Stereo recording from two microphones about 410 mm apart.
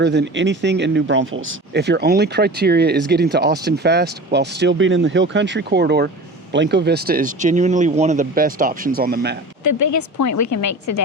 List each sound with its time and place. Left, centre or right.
0.0 s speech: right
9.6 s a woman's voice: left